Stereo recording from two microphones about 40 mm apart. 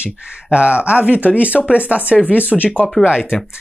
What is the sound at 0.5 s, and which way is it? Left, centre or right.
Speech, right.